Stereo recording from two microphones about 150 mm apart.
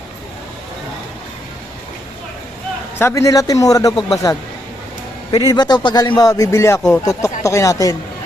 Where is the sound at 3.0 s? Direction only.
20° left (ahead or behind).